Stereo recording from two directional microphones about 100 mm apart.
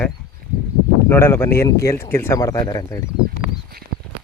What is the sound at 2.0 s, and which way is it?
Speech, 20° left (ahead or behind).